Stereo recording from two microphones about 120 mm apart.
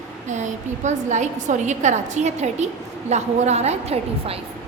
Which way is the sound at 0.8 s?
80° right.